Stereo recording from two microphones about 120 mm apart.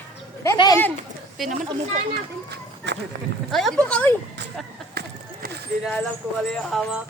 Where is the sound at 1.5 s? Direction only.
75° right (ahead or behind).